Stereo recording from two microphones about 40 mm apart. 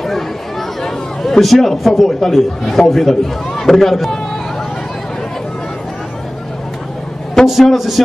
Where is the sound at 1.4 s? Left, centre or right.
Centre.